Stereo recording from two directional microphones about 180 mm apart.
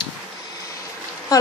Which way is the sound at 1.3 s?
20° left (ahead or behind).